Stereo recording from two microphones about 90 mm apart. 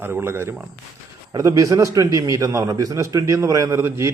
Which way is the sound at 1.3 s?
40° right (ahead or behind).